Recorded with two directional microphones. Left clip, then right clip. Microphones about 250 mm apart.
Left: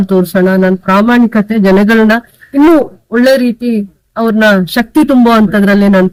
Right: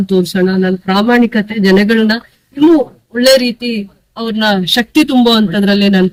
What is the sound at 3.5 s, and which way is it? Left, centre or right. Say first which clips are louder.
Speech: left 3 dB; left.